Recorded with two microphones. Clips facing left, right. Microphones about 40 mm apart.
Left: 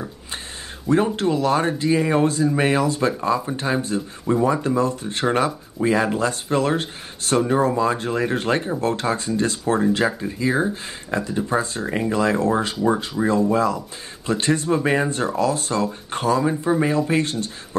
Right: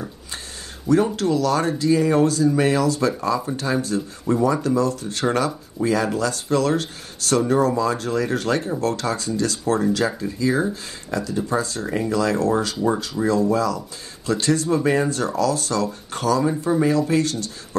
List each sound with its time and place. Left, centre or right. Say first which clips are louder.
1.1 s speech: even; left